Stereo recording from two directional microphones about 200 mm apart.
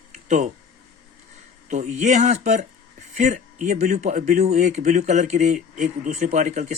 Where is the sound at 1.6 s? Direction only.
35° right (ahead or behind).